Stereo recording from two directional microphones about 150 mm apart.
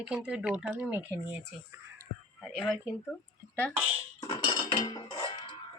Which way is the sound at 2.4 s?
Centre (ahead or behind).